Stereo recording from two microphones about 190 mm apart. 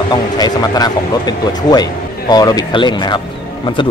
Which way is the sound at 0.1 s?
20° left (ahead or behind).